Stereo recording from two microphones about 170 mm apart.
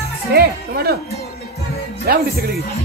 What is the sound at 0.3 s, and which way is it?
Speech, 65° right (ahead or behind).